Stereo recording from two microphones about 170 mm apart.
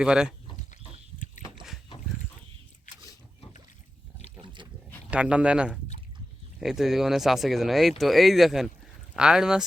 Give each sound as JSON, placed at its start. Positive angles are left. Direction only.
{"t": 0.0, "sound": "speech", "side_deg": -5}
{"t": 4.4, "sound": "roaring cats", "side_deg": -30}
{"t": 5.1, "sound": "speech", "side_deg": -5}